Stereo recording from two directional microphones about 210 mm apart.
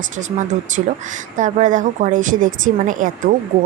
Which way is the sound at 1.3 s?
35° right (ahead or behind).